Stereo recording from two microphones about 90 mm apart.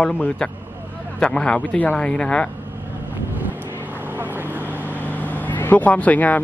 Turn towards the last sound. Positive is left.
turn(degrees=15)  # may be behind; listen again after turning